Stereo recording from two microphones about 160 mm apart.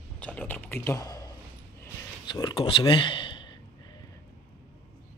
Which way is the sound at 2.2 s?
30° left (ahead or behind).